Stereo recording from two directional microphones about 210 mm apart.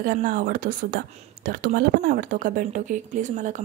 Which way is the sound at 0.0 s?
40° right (ahead or behind).